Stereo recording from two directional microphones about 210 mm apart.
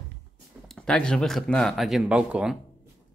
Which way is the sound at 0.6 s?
5° left (ahead or behind).